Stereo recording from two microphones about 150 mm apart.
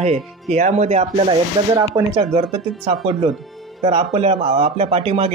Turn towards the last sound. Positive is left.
turn(degrees=-40)  # may be behind; listen again after turning